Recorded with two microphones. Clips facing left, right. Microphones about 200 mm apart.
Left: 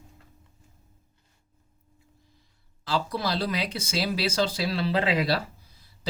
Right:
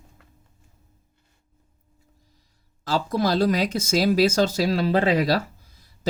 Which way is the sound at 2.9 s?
45° right (ahead or behind).